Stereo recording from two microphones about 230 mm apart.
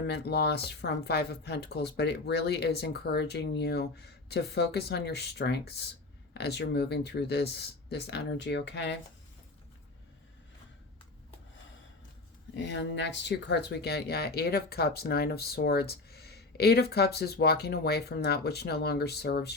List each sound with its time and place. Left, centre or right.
0.0 s speech: left
12.5 s speech: left